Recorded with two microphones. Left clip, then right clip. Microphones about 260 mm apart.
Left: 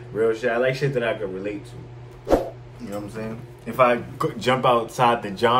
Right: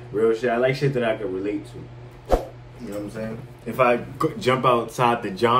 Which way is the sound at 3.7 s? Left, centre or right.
Centre.